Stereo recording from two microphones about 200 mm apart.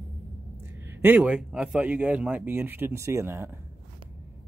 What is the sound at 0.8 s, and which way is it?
Speech, 10° right (ahead or behind).